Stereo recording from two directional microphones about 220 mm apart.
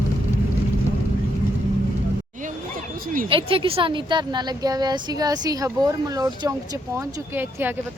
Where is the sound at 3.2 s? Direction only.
25° right (ahead or behind); by 7.8 s 10° right (ahead or behind).